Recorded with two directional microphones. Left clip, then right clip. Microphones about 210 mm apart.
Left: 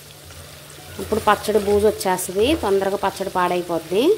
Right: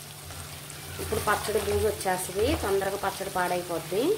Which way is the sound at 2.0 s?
35° left (ahead or behind).